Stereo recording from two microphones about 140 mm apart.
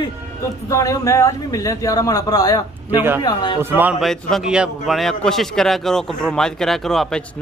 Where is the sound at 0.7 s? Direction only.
20° left (ahead or behind).